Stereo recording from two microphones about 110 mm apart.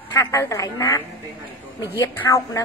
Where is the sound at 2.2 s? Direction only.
30° left (ahead or behind).